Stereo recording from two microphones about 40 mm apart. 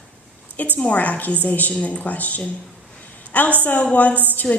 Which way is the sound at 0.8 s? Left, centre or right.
Left.